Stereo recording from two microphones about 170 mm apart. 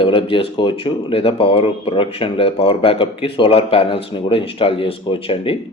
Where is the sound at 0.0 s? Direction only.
30° left (ahead or behind).